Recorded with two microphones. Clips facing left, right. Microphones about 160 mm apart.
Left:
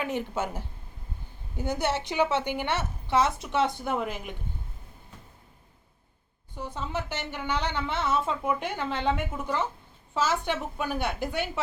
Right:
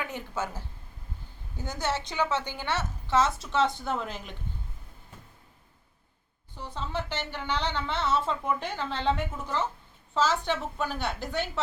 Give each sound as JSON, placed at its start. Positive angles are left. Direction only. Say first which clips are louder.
{"t": 0.0, "sound": "a woman's voice", "louder": "left 4 dB", "side_deg": 20}
{"t": 3.2, "sound": "speech", "louder": "left 2 dB", "side_deg": 55}
{"t": 3.5, "sound": "a woman's voice", "louder": "even", "side_deg": 15}
{"t": 6.6, "sound": "a woman's voice", "louder": "left 1 dB", "side_deg": 10}